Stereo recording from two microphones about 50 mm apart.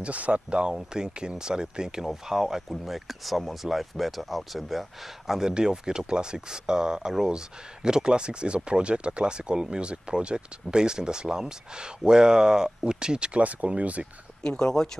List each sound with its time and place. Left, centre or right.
0.0 s speech: right; by 5.5 s centre
5.5 s speech: centre
14.4 s speech: centre